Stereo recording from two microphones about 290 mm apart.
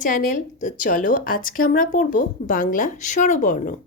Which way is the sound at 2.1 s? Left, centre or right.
Left.